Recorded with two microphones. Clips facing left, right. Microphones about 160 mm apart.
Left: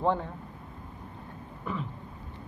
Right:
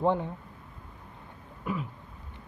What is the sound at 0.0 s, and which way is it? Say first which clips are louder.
Speech: right 1 dB; 15° right (ahead or behind).